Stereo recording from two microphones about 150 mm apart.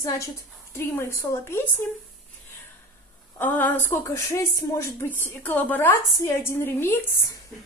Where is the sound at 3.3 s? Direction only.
10° left (ahead or behind).